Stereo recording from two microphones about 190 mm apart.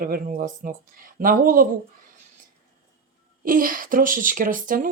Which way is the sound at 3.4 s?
45° right (ahead or behind).